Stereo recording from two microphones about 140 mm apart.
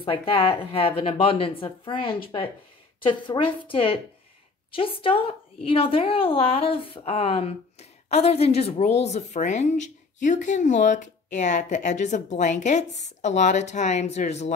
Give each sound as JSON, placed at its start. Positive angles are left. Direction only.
{"t": 0.0, "sound": "a woman's voice", "side_deg": 40}